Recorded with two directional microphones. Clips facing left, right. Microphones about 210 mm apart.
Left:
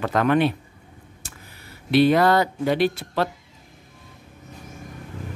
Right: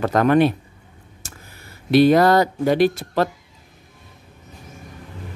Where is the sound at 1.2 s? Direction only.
45° right (ahead or behind).